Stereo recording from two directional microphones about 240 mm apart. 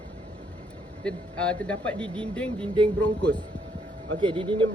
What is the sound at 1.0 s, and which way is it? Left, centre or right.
Speech, centre.